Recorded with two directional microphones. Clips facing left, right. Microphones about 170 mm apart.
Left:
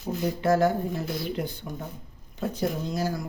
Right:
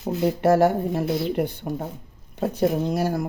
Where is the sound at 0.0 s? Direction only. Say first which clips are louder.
Right 6 dB; 65° right (ahead or behind).